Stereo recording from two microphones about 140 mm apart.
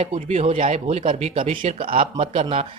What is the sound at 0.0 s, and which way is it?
Speech, 45° right (ahead or behind).